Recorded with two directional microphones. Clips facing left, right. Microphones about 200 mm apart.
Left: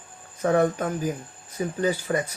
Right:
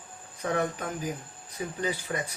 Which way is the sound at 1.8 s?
40° left (ahead or behind).